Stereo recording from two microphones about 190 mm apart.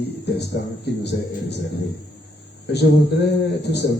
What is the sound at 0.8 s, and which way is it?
Speech, 60° left (ahead or behind).